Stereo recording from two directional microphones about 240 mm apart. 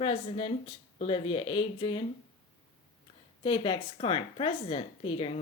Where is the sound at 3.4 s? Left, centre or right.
Left.